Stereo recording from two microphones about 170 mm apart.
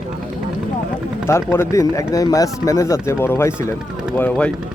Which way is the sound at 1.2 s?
15° left (ahead or behind).